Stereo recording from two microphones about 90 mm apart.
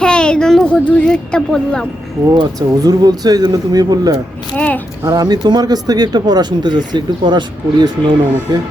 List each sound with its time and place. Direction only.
0.0 s a sound: 10° left (ahead or behind)
2.3 s speech: 45° right (ahead or behind)
4.5 s a child's voice: 15° left (ahead or behind)
5.0 s speech: 45° right (ahead or behind)